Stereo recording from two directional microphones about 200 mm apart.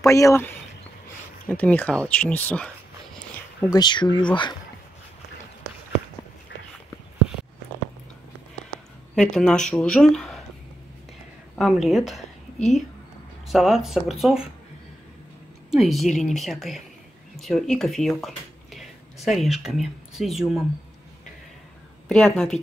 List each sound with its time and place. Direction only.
0.0 s speech: 15° left (ahead or behind)
1.5 s speech: 5° left (ahead or behind)
3.7 s speech: 20° left (ahead or behind)
9.1 s speech: 5° left (ahead or behind)
11.5 s a woman's voice: centre (ahead or behind)
15.7 s speech: centre (ahead or behind)
22.1 s speech: 5° left (ahead or behind)